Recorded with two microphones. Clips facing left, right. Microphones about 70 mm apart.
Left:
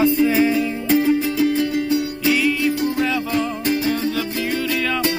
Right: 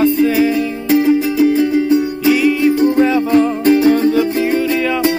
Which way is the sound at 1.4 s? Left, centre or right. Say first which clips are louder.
Right 6 dB; right.